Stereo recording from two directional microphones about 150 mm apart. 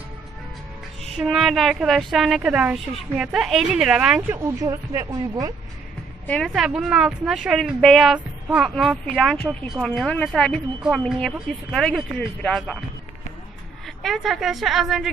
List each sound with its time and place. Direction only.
1.1 s a woman's voice: centre (ahead or behind)
4.6 s speech: 25° right (ahead or behind)
6.2 s a woman's voice: 5° left (ahead or behind)
13.8 s a woman's voice: centre (ahead or behind)